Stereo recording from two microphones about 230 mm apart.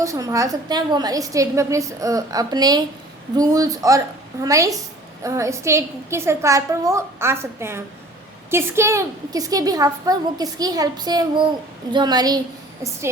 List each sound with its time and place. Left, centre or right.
0.0 s a woman's voice: centre